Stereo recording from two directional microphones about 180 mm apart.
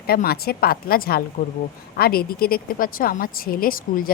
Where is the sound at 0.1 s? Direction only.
60° left (ahead or behind).